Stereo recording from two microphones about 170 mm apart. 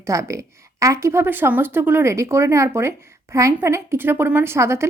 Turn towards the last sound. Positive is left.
turn(degrees=-15)  # may be behind; listen again after turning